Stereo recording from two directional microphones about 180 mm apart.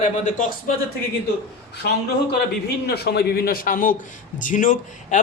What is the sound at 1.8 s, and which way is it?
A man's voice, 60° left (ahead or behind).